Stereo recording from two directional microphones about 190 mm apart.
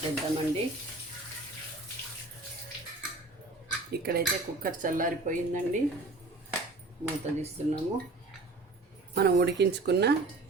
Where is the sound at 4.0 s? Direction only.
55° right (ahead or behind).